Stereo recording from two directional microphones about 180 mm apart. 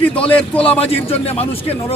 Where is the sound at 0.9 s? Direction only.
35° left (ahead or behind).